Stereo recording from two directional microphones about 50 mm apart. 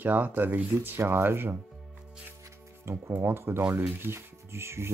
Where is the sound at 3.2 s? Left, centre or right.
Right.